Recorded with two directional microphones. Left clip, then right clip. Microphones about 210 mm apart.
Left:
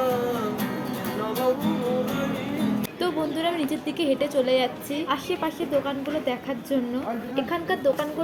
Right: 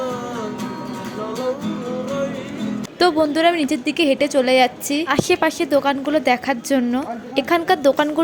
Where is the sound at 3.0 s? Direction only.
50° right (ahead or behind).